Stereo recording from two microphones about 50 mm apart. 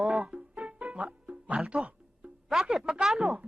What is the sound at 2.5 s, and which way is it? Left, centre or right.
Speech, centre.